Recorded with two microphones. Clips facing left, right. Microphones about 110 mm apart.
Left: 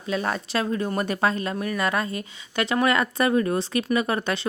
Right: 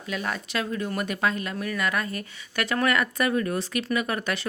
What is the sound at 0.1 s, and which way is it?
Speech, 35° left (ahead or behind).